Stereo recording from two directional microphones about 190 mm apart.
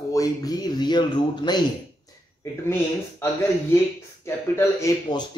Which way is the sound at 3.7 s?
15° left (ahead or behind).